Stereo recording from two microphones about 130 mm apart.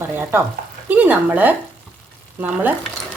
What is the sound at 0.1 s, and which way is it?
A woman's voice, 15° right (ahead or behind).